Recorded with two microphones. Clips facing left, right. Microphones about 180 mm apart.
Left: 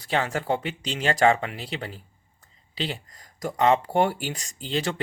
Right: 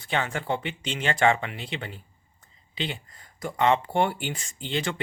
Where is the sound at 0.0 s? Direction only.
40° left (ahead or behind).